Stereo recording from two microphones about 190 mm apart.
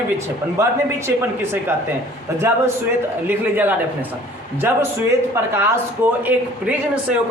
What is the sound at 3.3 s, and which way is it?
A woman's voice, 10° right (ahead or behind).